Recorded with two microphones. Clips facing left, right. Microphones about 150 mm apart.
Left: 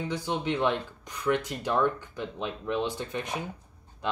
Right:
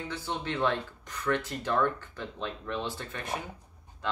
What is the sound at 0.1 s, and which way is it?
Speech, 15° left (ahead or behind).